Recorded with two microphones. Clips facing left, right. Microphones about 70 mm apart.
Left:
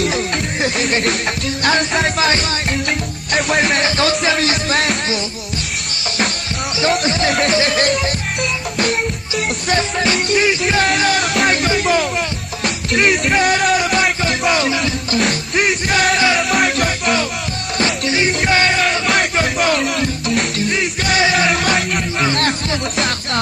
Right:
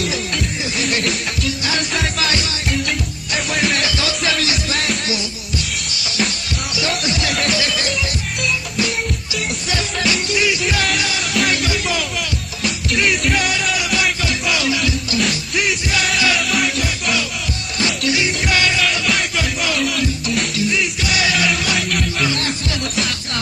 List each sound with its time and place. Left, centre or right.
0.0 s music: left
3.3 s music: left
6.8 s music: left
10.1 s music: left
13.3 s music: left
17.7 s music: left
21.5 s music: left